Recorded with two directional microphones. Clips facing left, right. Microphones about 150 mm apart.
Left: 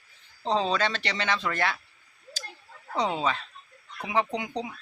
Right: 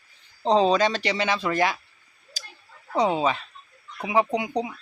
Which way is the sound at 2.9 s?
10° right (ahead or behind).